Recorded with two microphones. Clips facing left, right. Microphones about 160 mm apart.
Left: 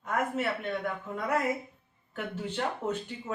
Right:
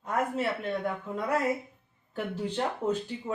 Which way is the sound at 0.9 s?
35° right (ahead or behind).